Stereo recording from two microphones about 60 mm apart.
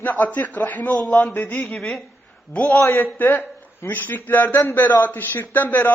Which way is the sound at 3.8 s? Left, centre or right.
Left.